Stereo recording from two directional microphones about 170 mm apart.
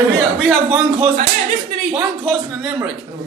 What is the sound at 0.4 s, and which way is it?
Speech, 5° right (ahead or behind).